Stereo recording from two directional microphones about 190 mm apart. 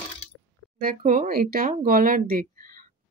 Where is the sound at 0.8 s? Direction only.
45° right (ahead or behind).